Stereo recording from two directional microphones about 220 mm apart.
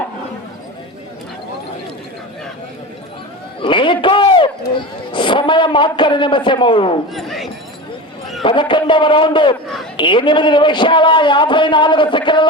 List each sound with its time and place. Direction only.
3.6 s a sound: 20° left (ahead or behind)
7.1 s speech: centre (ahead or behind)
8.4 s a man's voice: 20° left (ahead or behind)